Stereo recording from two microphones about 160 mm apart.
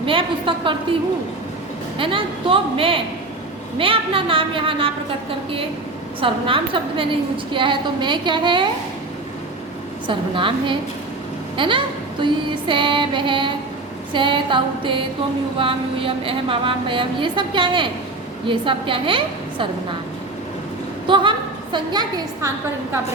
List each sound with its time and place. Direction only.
0.0 s a woman's voice: 35° right (ahead or behind)
2.0 s a woman's voice: 35° right (ahead or behind)
10.1 s a woman's voice: 30° right (ahead or behind)
21.1 s a woman's voice: 30° right (ahead or behind)